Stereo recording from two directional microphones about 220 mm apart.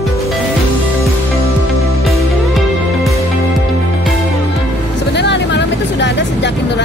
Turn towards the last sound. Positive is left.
turn(degrees=50)  # may be behind; listen again after turning